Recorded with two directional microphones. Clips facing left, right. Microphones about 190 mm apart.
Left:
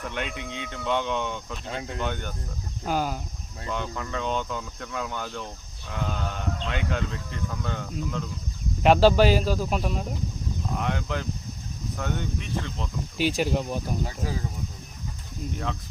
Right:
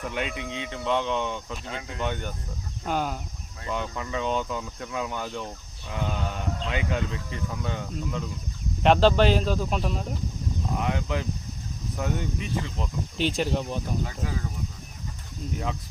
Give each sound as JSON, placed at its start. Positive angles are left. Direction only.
{"t": 0.0, "sound": "speech", "side_deg": -5}
{"t": 13.1, "sound": "speech", "side_deg": 5}
{"t": 14.0, "sound": "speech", "side_deg": 30}
{"t": 15.5, "sound": "speech", "side_deg": -5}